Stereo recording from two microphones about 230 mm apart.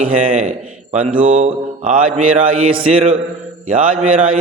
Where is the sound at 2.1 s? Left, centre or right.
Right.